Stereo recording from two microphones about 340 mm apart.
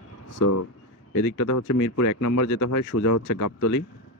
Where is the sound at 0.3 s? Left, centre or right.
Left.